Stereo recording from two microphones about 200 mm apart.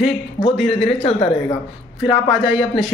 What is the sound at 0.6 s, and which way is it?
Speech, centre (ahead or behind).